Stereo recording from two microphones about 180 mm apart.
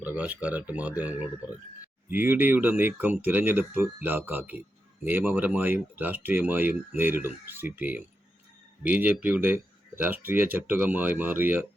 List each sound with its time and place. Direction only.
0.0 s speech: 10° right (ahead or behind)